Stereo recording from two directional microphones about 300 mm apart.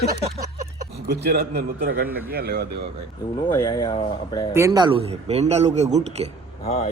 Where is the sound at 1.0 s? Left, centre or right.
Right.